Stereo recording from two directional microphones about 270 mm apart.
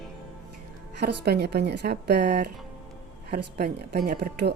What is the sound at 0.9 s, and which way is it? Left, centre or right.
Speech, right.